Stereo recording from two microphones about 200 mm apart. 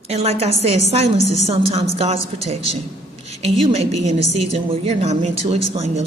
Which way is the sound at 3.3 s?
30° right (ahead or behind).